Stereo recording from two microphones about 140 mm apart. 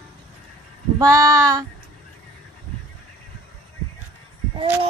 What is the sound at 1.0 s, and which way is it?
Child singing, 25° right (ahead or behind).